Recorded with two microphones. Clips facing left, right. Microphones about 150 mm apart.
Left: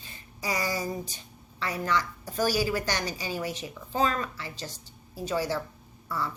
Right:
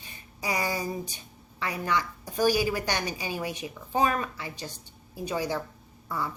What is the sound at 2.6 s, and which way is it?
A woman's voice, 15° right (ahead or behind).